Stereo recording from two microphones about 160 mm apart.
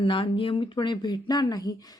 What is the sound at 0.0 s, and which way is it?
Speech, 35° left (ahead or behind).